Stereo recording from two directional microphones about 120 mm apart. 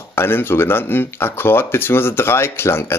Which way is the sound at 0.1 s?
20° left (ahead or behind).